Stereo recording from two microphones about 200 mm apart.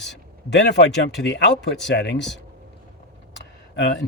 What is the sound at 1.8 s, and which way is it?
Speech, 60° left (ahead or behind).